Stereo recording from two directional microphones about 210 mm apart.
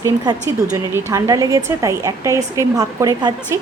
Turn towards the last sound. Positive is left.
turn(degrees=-15)  # may be behind; listen again after turning